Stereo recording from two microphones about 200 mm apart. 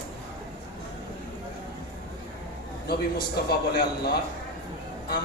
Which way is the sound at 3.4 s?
50° left (ahead or behind).